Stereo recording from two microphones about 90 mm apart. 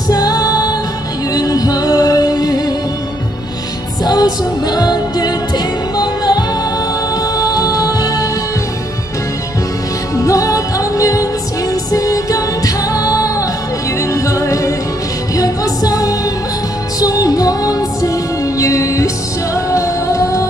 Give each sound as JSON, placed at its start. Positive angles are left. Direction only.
{"t": 0.1, "sound": "music", "side_deg": 45}
{"t": 4.0, "sound": "music", "side_deg": 50}
{"t": 10.2, "sound": "music", "side_deg": 40}